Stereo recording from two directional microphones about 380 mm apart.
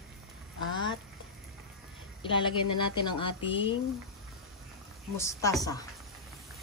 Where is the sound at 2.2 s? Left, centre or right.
Centre.